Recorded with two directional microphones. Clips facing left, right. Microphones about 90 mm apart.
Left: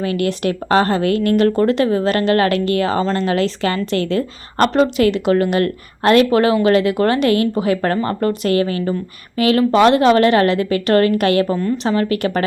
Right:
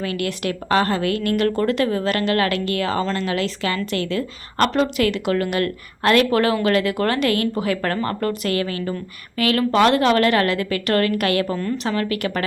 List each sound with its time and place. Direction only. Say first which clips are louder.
0.0 s a woman's voice: left 5 dB; 30° left (ahead or behind)